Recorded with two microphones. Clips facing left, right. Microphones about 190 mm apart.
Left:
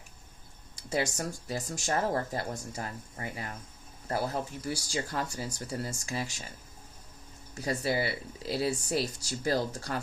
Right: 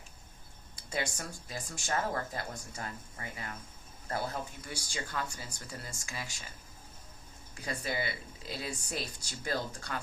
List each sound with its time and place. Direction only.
0.9 s speech: 40° left (ahead or behind)
7.5 s speech: 40° left (ahead or behind)